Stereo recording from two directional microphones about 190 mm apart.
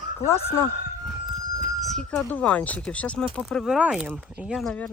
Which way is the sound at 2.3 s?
5° left (ahead or behind).